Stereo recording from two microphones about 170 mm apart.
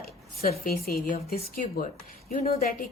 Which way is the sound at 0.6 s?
60° left (ahead or behind).